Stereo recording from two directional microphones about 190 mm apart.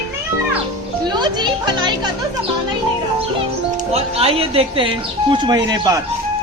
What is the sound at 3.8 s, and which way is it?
Speech, 30° right (ahead or behind).